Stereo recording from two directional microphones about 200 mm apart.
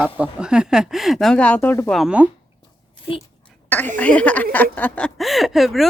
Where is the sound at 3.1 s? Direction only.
25° left (ahead or behind).